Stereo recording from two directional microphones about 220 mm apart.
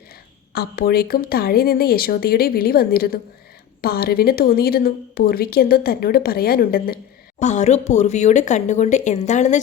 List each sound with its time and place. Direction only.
0.5 s speech: 45° left (ahead or behind)